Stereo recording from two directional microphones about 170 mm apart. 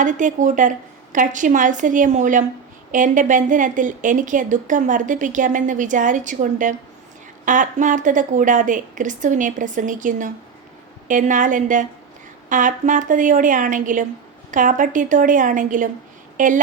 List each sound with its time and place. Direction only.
0.0 s a woman's voice: 50° right (ahead or behind)